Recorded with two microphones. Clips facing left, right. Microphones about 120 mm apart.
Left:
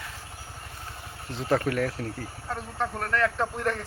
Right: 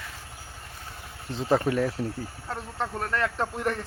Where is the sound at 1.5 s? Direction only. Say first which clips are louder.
Right 1 dB; 15° right (ahead or behind).